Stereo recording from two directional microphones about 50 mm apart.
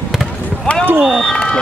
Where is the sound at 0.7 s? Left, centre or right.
Left.